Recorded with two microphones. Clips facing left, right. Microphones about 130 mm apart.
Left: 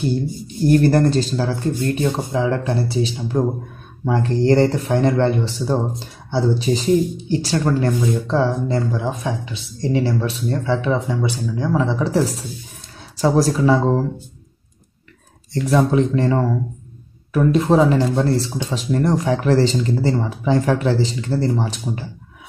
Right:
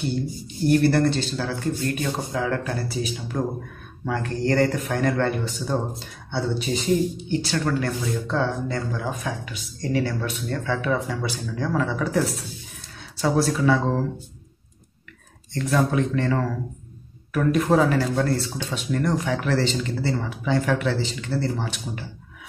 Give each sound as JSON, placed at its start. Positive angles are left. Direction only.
{"t": 0.7, "sound": "speech", "side_deg": 40}
{"t": 2.0, "sound": "speech", "side_deg": 20}
{"t": 13.2, "sound": "speech", "side_deg": 35}
{"t": 15.7, "sound": "speech", "side_deg": 30}